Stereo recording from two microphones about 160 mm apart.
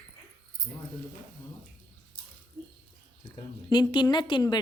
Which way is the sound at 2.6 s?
35° right (ahead or behind).